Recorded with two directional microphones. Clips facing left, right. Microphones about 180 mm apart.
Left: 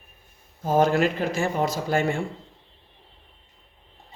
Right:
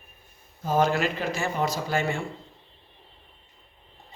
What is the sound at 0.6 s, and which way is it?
A man's voice, 50° left (ahead or behind).